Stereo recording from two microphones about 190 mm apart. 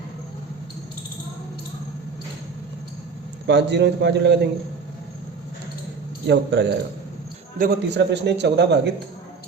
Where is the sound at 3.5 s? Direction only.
65° right (ahead or behind).